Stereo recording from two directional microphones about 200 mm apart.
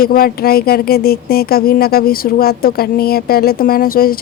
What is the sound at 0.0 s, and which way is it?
Speech, 50° left (ahead or behind).